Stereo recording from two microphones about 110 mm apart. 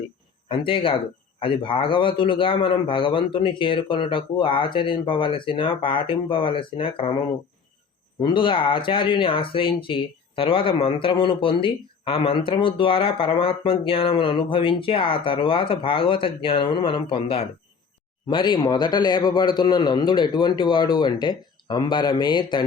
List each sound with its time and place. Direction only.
0.4 s speech: 55° left (ahead or behind)
8.2 s speech: 50° left (ahead or behind)